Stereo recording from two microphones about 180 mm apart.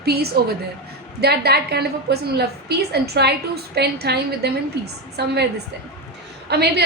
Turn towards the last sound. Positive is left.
turn(degrees=-65)  # may be behind; listen again after turning